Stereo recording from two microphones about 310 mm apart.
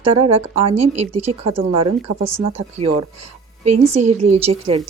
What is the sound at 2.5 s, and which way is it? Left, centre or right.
Speech, centre.